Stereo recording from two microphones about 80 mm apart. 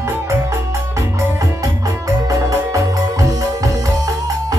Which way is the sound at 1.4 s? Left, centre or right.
Right.